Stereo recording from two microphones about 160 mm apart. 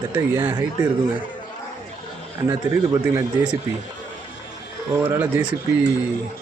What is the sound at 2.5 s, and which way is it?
Speech, 20° right (ahead or behind).